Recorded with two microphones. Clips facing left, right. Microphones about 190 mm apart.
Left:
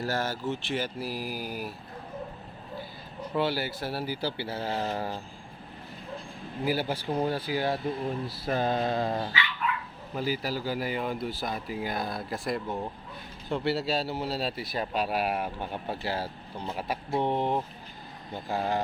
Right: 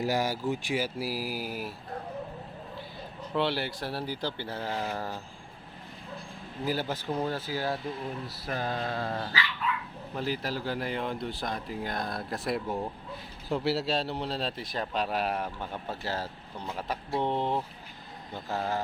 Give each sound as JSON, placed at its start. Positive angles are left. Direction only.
{"t": 0.0, "sound": "speech", "side_deg": -15}
{"t": 3.2, "sound": "a man's voice", "side_deg": 5}
{"t": 6.7, "sound": "a man's voice", "side_deg": 10}
{"t": 8.3, "sound": "a sound", "side_deg": 25}
{"t": 10.2, "sound": "a man's voice", "side_deg": 5}